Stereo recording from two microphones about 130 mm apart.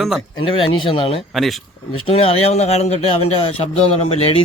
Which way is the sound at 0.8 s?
45° left (ahead or behind).